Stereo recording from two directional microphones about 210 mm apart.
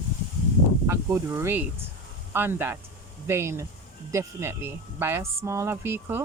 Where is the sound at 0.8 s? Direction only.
15° right (ahead or behind).